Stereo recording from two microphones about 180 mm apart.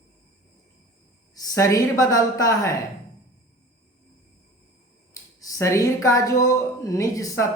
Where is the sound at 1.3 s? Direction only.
20° left (ahead or behind).